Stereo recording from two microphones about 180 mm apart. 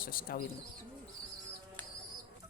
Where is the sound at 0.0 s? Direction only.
55° left (ahead or behind).